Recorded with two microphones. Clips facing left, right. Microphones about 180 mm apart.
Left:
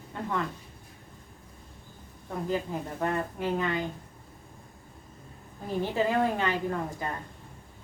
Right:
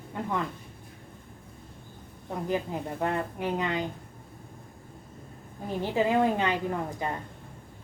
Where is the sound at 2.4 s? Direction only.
20° right (ahead or behind).